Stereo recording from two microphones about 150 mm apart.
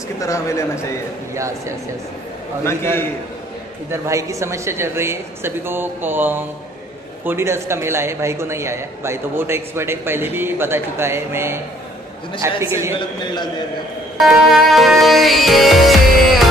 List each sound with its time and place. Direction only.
0.2 s a man's voice: 20° left (ahead or behind)
2.6 s a man's voice: 15° left (ahead or behind)
3.9 s a man's voice: 20° right (ahead or behind)
14.1 s music: centre (ahead or behind)